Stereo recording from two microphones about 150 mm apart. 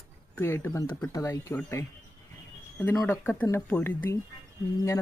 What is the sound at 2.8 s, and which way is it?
Speech, 15° left (ahead or behind).